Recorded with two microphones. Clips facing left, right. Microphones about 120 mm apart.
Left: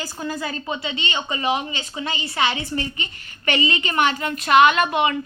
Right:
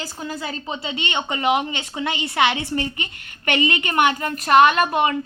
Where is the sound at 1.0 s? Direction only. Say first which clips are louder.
Right 3 dB; 60° right (ahead or behind).